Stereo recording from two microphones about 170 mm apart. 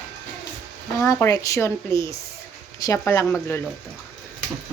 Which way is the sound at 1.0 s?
15° left (ahead or behind).